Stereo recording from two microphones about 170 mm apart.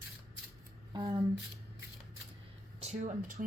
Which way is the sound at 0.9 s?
25° right (ahead or behind).